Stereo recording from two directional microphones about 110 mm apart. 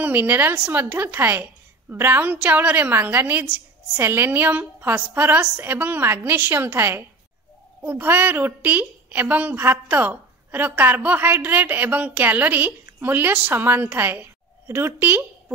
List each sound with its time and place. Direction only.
0.0 s a woman's voice: 15° right (ahead or behind)